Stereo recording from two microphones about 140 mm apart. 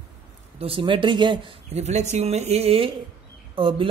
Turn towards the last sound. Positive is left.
turn(degrees=-40)  # may be behind; listen again after turning